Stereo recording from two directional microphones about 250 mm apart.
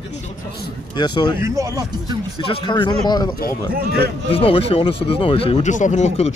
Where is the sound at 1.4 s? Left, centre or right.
Centre.